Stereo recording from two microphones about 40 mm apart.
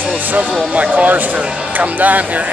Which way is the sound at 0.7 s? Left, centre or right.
Right.